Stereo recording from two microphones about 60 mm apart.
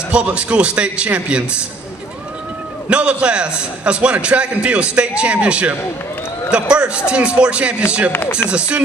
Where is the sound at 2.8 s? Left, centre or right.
Centre.